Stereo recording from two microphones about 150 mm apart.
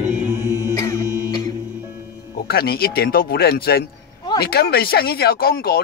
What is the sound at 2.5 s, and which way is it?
Speech, 90° left.